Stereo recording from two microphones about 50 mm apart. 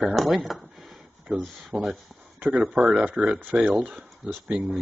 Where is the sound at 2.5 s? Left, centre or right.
Centre.